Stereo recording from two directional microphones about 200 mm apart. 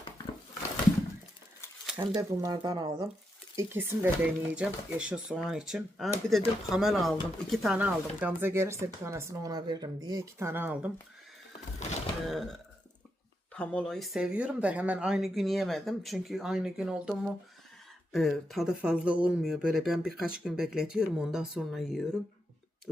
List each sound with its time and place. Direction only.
1.9 s speech: 5° right (ahead or behind)
2.4 s speech: 20° right (ahead or behind)
12.3 s speech: centre (ahead or behind)